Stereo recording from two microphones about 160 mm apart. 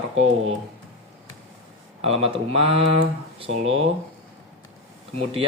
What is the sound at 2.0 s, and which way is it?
Speech, 40° right (ahead or behind).